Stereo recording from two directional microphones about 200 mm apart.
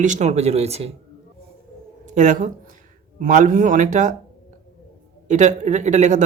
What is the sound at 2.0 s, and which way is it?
A man's voice, 40° right (ahead or behind).